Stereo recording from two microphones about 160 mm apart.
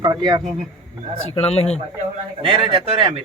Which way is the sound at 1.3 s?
40° left (ahead or behind).